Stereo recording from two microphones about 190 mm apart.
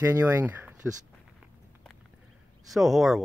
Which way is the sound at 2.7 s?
Centre (ahead or behind).